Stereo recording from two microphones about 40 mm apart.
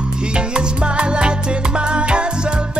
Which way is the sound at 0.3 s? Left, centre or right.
Right.